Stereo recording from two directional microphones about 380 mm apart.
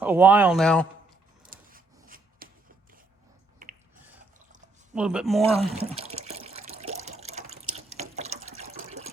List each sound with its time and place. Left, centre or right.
0.0 s speech: centre
1.5 s rub: right
3.6 s a sound: right
4.9 s speech: centre
5.7 s water: centre